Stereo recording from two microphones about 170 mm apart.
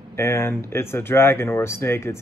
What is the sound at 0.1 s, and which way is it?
Speech, 15° left (ahead or behind).